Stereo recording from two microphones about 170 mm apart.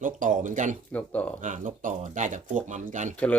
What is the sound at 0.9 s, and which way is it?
Speech, 10° left (ahead or behind).